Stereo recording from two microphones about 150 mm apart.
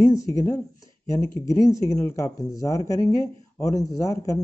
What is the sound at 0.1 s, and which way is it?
Speech, 20° left (ahead or behind).